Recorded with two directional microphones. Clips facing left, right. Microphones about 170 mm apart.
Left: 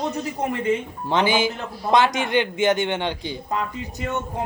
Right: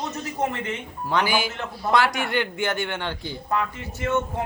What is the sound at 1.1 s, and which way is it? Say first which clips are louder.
A man's voice: left 3 dB; 20° left (ahead or behind).